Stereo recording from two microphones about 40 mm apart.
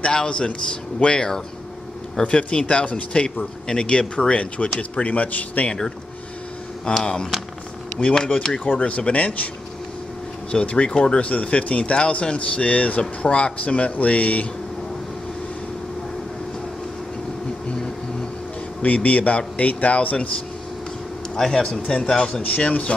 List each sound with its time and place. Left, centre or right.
0.0 s a man's voice: left
5.7 s a man's voice: left
8.0 s a man's voice: left
8.6 s a man's voice: left
10.5 s a man's voice: left
18.8 s a man's voice: left
21.5 s speech: centre
22.0 s a man's voice: left